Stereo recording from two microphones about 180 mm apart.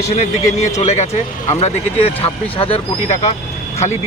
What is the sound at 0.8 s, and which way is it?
Speech, 40° left (ahead or behind).